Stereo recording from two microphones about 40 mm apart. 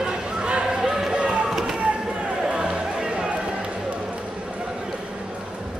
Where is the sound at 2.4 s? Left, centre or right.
Right.